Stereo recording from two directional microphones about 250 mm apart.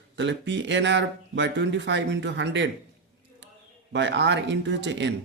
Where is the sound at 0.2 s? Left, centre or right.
Right.